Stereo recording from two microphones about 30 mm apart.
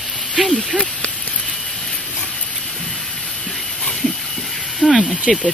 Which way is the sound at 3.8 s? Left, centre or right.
Centre.